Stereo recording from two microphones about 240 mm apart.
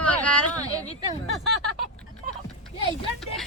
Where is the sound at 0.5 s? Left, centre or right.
Centre.